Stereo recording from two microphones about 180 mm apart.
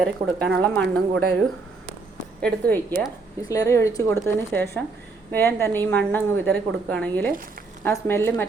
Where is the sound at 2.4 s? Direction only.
10° left (ahead or behind).